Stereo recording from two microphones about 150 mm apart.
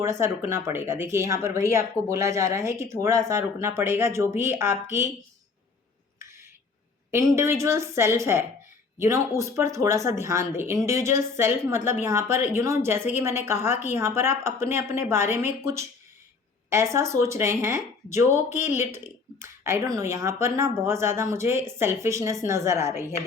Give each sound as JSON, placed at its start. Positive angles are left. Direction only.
{"t": 0.0, "sound": "a woman's voice", "side_deg": -20}
{"t": 7.1, "sound": "a woman's voice", "side_deg": -20}